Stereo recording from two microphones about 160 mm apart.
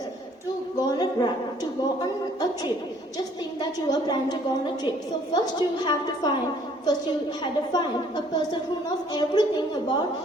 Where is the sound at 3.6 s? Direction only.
25° left (ahead or behind).